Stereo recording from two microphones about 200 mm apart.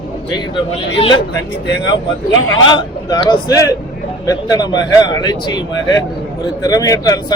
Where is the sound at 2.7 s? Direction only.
20° left (ahead or behind).